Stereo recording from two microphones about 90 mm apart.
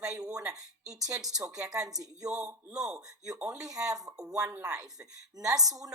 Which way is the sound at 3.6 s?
40° right (ahead or behind).